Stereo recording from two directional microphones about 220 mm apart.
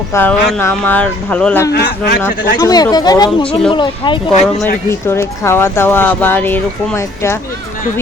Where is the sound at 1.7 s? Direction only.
45° left (ahead or behind).